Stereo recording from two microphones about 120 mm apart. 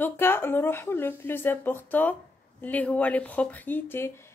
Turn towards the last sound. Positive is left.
turn(degrees=15)  # may be behind; listen again after turning